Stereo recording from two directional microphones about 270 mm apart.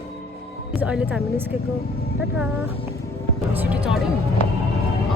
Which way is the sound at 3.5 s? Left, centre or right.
Centre.